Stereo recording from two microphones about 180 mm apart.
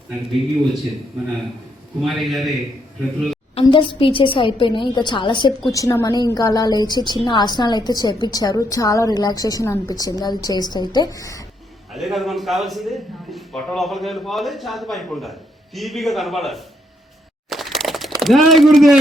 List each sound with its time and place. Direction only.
2.0 s a man's voice: centre (ahead or behind)
3.5 s a woman's voice: 30° left (ahead or behind)
11.9 s a man's voice: centre (ahead or behind)
17.5 s a sound: centre (ahead or behind)
18.2 s a man's voice: centre (ahead or behind)